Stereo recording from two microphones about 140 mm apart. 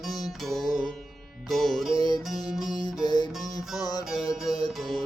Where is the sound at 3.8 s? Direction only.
30° left (ahead or behind).